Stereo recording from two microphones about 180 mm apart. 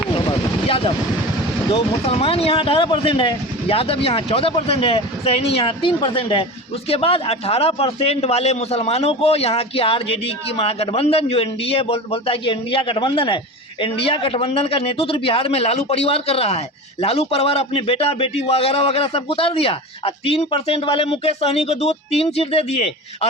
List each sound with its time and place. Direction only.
0.3 s vehicle: 30° left (ahead or behind)
1.7 s a man's voice: 30° left (ahead or behind)